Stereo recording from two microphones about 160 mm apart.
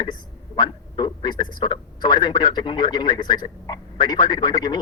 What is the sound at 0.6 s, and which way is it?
A man's voice, 30° left (ahead or behind).